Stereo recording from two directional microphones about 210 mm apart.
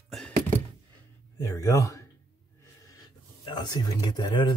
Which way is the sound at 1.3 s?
15° left (ahead or behind).